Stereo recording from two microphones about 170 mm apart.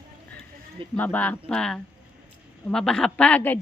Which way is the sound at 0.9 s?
10° left (ahead or behind).